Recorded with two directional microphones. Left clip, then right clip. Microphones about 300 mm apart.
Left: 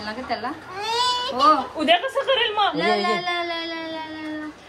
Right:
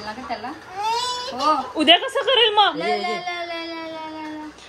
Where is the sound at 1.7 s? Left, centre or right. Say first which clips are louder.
Right 3 dB; right.